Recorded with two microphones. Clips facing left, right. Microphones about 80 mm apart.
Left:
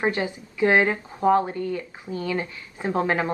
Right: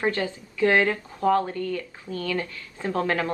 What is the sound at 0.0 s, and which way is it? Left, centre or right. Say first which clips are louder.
Speech: left 1 dB; centre.